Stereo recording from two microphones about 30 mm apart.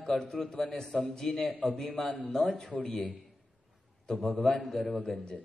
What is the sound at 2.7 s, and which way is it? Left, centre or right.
Speech, left.